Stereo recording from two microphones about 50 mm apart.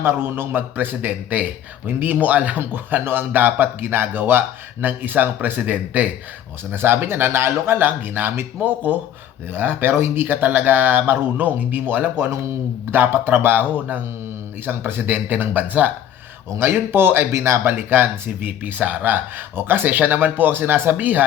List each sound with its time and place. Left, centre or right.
0.0 s speech: right
6.7 s speech: right
16.6 s speech: right
17.7 s speech: right
21.0 s speech: right